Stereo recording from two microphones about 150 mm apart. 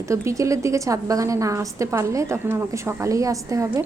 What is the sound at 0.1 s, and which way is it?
A woman's voice, 20° right (ahead or behind).